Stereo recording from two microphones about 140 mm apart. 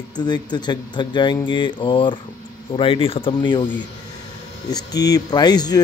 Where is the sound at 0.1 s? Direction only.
30° left (ahead or behind).